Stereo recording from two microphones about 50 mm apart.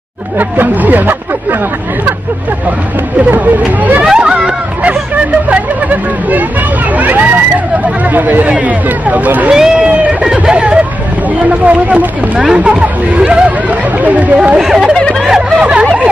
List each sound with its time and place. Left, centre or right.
0.4 s speech: right
3.3 s speech: right
4.0 s hubbub: centre
5.5 s speech: right
9.5 s speech: centre
14.6 s speech: centre
15.6 s speech: right